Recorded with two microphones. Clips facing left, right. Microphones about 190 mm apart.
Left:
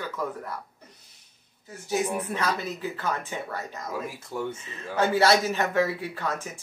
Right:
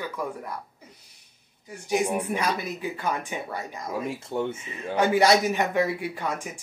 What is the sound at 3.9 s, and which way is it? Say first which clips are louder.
Speech: right 5 dB; 25° right (ahead or behind).